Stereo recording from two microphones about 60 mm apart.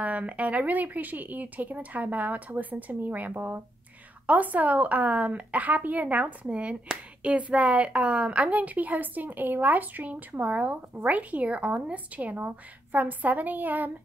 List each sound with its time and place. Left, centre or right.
0.0 s a woman's voice: right